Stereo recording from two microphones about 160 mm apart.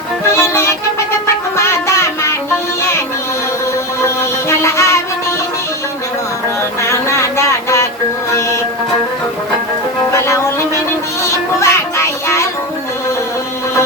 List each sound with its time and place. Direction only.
0.3 s music: 15° left (ahead or behind)
4.0 s music: 15° left (ahead or behind)
6.8 s a sound: 15° left (ahead or behind)
10.1 s music: 20° left (ahead or behind)
11.6 s music: 15° left (ahead or behind)